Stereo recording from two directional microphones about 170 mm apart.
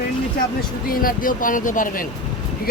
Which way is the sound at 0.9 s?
55° left (ahead or behind).